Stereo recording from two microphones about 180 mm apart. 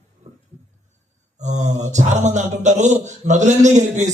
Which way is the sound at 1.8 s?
40° right (ahead or behind).